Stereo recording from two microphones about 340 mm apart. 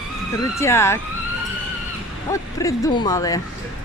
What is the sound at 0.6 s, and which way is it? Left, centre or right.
Speech, centre.